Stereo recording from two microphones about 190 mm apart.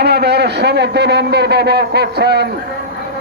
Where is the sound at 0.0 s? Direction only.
60° right (ahead or behind).